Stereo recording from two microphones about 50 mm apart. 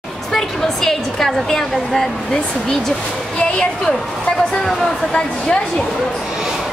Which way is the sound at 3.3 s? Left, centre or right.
Centre.